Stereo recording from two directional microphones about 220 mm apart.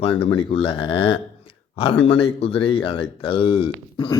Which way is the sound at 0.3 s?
25° left (ahead or behind).